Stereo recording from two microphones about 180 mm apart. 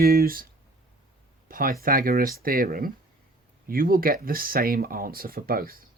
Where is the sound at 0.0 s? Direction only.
55° right (ahead or behind).